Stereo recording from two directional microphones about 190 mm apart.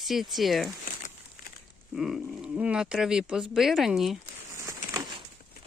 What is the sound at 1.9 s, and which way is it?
Speech, centre (ahead or behind).